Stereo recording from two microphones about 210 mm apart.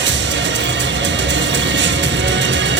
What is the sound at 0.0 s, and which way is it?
Music, 60° right (ahead or behind).